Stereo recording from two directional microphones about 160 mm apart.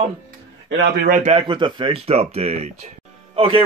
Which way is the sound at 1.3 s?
30° right (ahead or behind).